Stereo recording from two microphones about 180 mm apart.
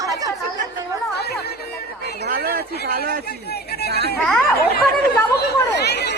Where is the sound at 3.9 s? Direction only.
60° right (ahead or behind).